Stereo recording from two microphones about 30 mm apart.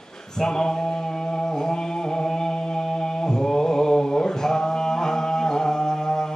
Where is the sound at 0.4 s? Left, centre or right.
Left.